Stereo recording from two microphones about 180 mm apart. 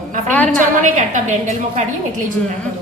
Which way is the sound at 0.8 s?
45° right (ahead or behind).